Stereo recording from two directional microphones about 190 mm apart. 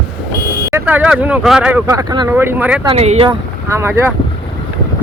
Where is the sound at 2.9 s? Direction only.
35° right (ahead or behind).